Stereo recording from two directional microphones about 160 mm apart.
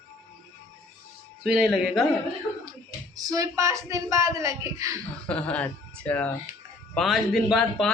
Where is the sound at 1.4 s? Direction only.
Centre (ahead or behind).